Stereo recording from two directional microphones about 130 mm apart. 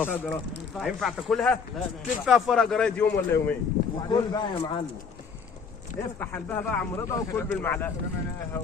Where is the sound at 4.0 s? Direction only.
30° left (ahead or behind).